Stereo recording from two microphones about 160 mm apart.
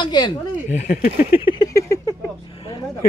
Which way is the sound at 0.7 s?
50° left (ahead or behind).